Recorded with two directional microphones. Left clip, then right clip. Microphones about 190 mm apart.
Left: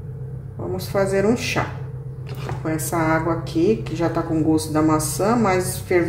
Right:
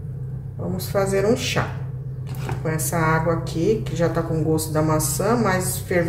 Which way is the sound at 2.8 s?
20° left (ahead or behind).